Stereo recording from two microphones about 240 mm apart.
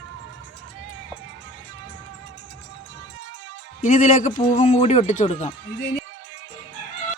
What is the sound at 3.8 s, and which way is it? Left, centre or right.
A man's voice, left.